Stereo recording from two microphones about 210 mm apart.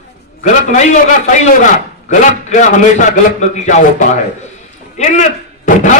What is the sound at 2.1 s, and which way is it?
A man's voice, 35° left (ahead or behind).